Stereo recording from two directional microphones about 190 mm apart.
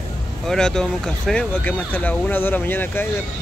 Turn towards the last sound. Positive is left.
turn(degrees=10)  # may be behind; listen again after turning